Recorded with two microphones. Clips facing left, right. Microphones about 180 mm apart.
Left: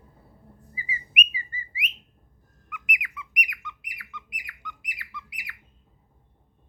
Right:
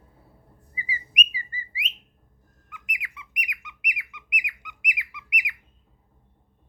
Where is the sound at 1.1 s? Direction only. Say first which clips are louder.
Left 2 dB; 30° right (ahead or behind).